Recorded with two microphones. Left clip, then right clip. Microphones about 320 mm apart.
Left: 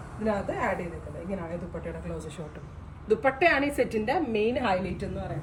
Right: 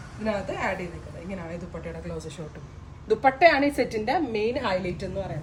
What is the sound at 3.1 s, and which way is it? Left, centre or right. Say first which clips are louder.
A woman's voice: right 4 dB; right.